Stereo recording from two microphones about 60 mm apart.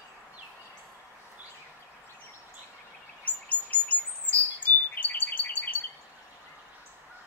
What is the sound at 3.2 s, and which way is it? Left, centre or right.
Chirp, left.